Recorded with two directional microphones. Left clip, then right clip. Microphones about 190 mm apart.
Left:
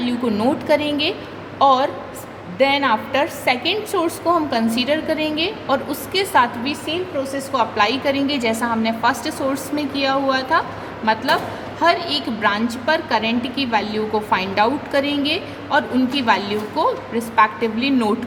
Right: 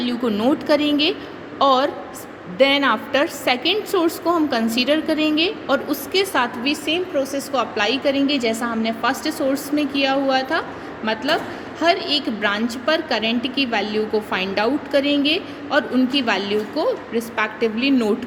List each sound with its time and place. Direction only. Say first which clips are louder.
0.0 s a woman's voice: left 1 dB; 10° right (ahead or behind)